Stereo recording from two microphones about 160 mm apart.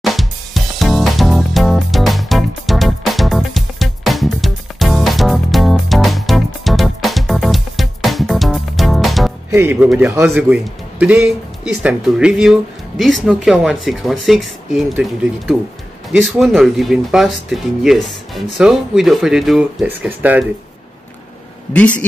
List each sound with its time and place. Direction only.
0.0 s music: centre (ahead or behind)
9.5 s speech: 15° right (ahead or behind)